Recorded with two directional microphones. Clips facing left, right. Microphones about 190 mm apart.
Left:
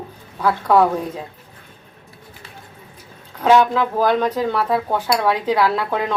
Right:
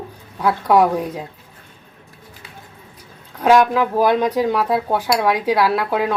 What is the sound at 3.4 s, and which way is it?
Speech, 10° right (ahead or behind).